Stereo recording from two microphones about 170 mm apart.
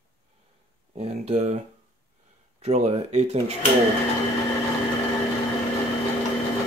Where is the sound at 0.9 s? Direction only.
40° right (ahead or behind).